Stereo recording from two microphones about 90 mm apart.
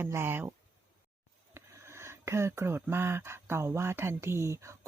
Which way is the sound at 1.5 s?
30° right (ahead or behind).